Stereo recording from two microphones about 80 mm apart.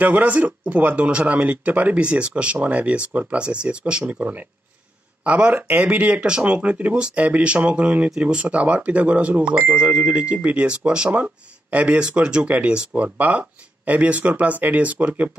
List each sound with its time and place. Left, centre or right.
0.0 s speech: centre